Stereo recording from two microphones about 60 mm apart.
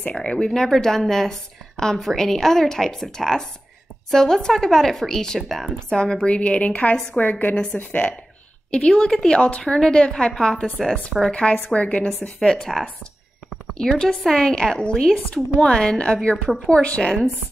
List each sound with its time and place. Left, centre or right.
0.1 s a woman's voice: centre
11.3 s a woman's voice: centre